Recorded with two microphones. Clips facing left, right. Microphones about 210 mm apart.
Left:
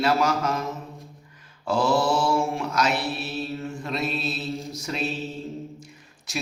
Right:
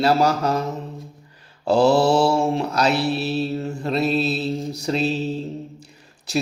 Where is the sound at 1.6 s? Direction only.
30° right (ahead or behind).